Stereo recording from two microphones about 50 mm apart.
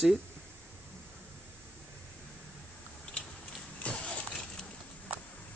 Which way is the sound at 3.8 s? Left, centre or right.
Left.